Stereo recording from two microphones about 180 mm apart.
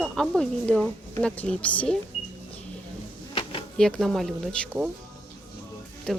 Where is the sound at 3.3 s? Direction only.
30° left (ahead or behind).